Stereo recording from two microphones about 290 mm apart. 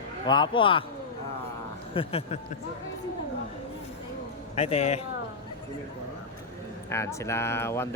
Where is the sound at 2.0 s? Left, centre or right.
Centre.